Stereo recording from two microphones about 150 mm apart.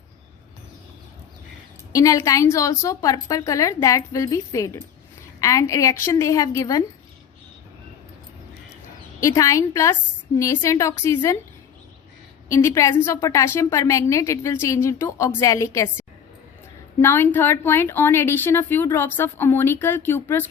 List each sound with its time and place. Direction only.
1.9 s a woman's voice: 20° left (ahead or behind)
9.2 s a woman's voice: 20° left (ahead or behind)
12.5 s a woman's voice: 20° left (ahead or behind)